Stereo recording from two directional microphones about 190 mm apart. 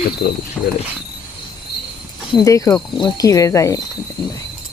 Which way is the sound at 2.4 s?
15° left (ahead or behind).